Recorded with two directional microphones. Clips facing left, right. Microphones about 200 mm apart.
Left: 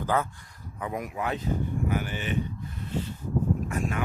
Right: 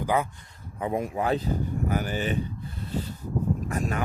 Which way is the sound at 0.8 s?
25° right (ahead or behind).